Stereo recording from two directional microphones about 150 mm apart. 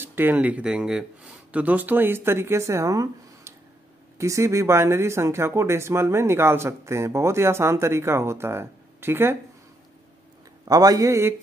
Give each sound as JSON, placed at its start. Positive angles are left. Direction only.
{"t": 0.0, "sound": "speech", "side_deg": -15}
{"t": 10.7, "sound": "a man's voice", "side_deg": -25}